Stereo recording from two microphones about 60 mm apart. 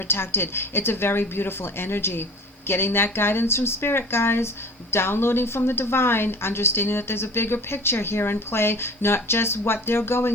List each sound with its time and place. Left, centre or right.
0.1 s a woman's voice: left